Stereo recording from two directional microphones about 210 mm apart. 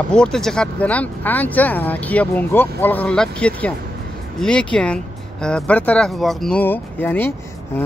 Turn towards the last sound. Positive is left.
turn(degrees=10)  # may be behind; listen again after turning